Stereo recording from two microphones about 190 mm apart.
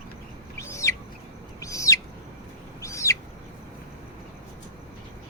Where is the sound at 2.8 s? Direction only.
15° left (ahead or behind).